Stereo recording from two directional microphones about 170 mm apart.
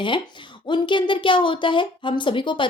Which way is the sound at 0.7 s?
30° left (ahead or behind).